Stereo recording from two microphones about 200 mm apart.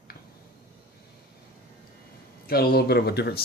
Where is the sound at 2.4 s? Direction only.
50° left (ahead or behind).